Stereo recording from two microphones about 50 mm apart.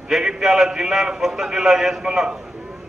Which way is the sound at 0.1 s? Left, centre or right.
Centre.